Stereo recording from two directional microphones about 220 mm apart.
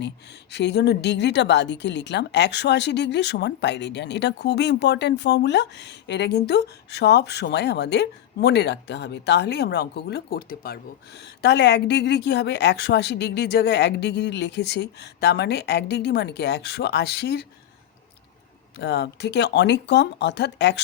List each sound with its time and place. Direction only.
0.5 s a woman's voice: 50° left (ahead or behind)
18.8 s a woman's voice: 50° left (ahead or behind)